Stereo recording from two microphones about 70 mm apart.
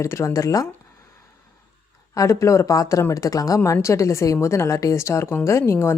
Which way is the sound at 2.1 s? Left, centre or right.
Left.